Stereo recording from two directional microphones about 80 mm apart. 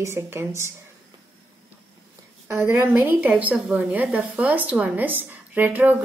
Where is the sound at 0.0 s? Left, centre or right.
Right.